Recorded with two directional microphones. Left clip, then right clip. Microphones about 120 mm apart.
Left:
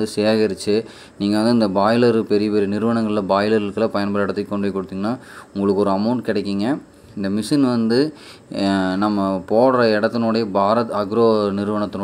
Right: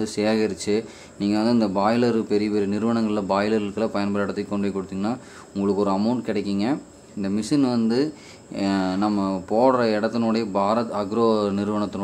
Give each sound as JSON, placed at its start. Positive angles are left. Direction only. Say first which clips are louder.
{"t": 0.0, "sound": "speech", "louder": "left 5 dB", "side_deg": 25}